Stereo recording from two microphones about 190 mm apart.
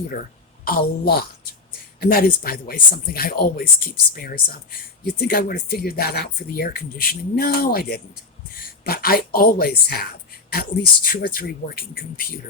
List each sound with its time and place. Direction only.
0.1 s speech: 50° left (ahead or behind)